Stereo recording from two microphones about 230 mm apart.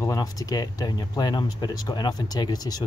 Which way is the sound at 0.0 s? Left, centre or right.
Centre.